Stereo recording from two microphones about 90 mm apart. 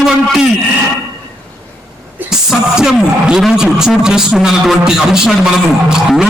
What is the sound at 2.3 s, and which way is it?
Speech, 5° right (ahead or behind).